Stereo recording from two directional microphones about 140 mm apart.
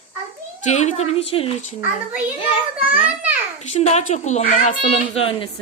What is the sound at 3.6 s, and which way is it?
A child's voice, 55° left (ahead or behind).